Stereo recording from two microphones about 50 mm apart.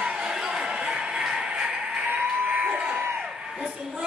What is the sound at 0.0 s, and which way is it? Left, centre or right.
Music, centre.